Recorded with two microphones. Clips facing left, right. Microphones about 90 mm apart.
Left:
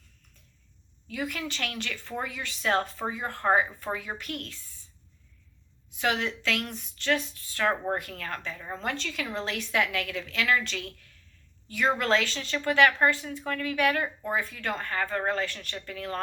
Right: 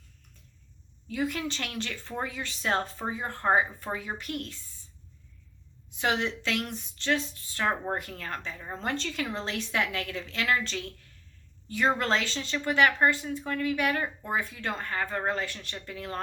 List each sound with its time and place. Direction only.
1.1 s a woman's voice: 30° right (ahead or behind)
6.0 s a woman's voice: 25° right (ahead or behind)